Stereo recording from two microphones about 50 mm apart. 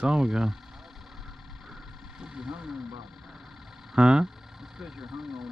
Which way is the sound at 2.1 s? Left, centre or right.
Centre.